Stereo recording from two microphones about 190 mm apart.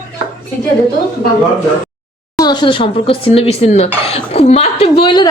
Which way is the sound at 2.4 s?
20° left (ahead or behind).